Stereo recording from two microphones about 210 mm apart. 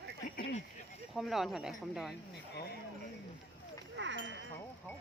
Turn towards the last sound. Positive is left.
turn(degrees=-60)  # may be behind; listen again after turning